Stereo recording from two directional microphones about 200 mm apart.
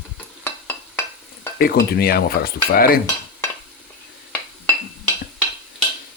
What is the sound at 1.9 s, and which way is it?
Speech, 50° left (ahead or behind).